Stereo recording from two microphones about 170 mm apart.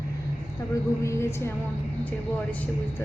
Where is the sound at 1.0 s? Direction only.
15° left (ahead or behind).